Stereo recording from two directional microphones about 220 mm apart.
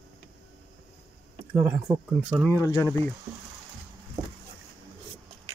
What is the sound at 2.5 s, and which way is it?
Speech, 15° left (ahead or behind).